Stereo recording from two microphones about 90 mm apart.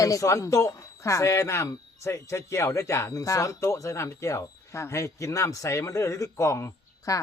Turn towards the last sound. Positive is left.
turn(degrees=35)  # may be behind; listen again after turning